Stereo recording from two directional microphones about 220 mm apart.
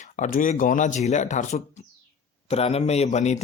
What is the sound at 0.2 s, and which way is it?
Speech, 35° left (ahead or behind).